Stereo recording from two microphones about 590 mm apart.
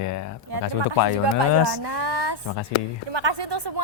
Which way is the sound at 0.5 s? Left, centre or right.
Right.